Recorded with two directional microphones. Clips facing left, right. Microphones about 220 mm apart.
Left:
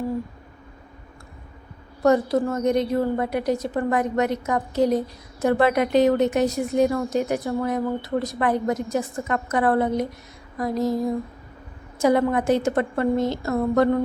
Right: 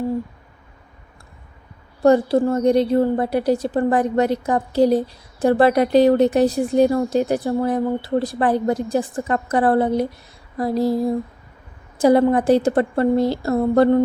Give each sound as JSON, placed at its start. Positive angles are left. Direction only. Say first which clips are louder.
{"t": 2.0, "sound": "a woman's voice", "louder": "right 4 dB", "side_deg": -30}